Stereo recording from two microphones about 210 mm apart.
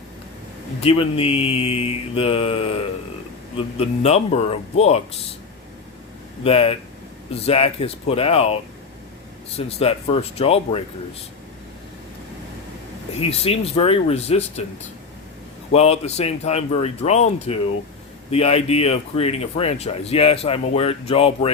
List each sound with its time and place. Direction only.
0.8 s speech: 25° left (ahead or behind)
6.4 s speech: 25° left (ahead or behind)
9.6 s speech: 30° left (ahead or behind)
13.1 s speech: 30° left (ahead or behind)